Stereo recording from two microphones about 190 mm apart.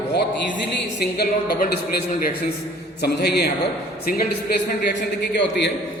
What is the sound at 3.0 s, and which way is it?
Speech, 60° left (ahead or behind).